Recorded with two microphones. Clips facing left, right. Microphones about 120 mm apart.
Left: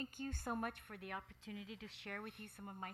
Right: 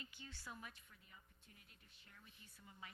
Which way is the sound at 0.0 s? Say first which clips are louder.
Left 12 dB; 50° left (ahead or behind).